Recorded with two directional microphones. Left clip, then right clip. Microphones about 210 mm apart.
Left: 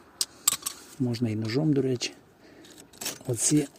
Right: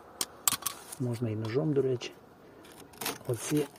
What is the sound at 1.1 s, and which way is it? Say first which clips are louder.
Speech: left 1 dB; 60° left (ahead or behind).